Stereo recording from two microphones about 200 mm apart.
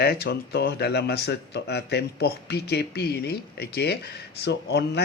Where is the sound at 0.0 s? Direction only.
55° left (ahead or behind).